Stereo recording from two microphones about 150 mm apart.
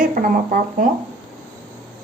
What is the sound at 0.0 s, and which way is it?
Speech, 65° right (ahead or behind).